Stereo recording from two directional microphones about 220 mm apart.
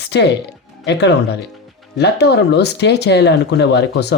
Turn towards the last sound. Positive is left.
turn(degrees=50)  # may be behind; listen again after turning